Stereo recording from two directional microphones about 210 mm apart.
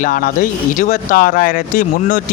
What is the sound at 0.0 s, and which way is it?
Speech, 40° left (ahead or behind).